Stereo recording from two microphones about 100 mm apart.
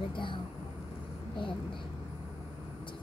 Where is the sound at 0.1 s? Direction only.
55° left (ahead or behind).